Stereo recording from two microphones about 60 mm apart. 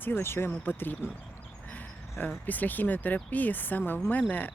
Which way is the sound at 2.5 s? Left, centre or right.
Left.